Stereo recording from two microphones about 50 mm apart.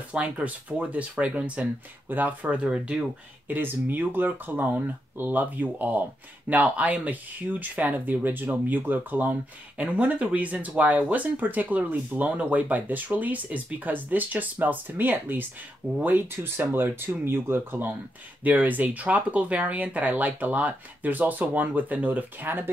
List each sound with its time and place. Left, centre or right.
0.1 s speech: right
2.0 s speech: right
2.5 s speech: right
3.4 s speech: right
18.4 s speech: right